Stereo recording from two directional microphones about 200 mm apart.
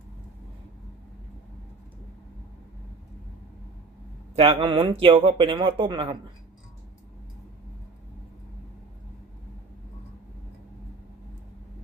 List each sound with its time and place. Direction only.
4.4 s speech: 25° right (ahead or behind)